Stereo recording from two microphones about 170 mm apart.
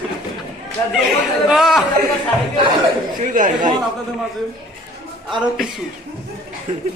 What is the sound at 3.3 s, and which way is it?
Speech, 50° right (ahead or behind).